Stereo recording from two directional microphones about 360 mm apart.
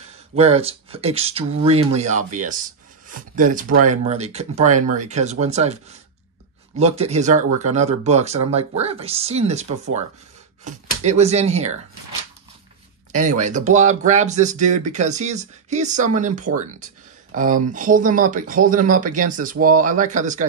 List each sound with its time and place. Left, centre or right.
0.4 s speech: centre
13.1 s speech: centre